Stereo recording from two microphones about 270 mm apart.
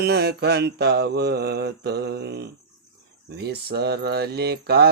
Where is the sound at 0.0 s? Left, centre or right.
Right.